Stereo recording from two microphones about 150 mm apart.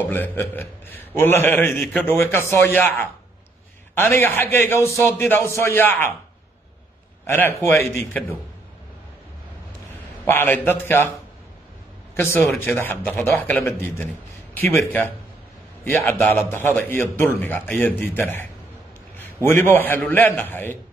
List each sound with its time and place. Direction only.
0.1 s a man's voice: 10° left (ahead or behind)
7.2 s a man's voice: 15° left (ahead or behind)
10.2 s a man's voice: 15° left (ahead or behind)
12.2 s a man's voice: 15° left (ahead or behind)